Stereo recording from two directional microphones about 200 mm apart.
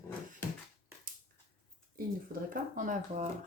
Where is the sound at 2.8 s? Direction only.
40° right (ahead or behind).